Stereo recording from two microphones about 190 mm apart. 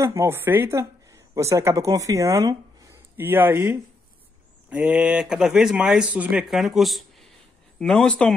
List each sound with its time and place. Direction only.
0.0 s speech: 15° right (ahead or behind); by 8.4 s 5° left (ahead or behind)